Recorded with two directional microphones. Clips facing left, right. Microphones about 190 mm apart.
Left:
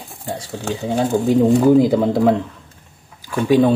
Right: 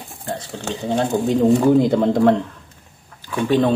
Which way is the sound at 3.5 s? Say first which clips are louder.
Left 3 dB; 10° left (ahead or behind).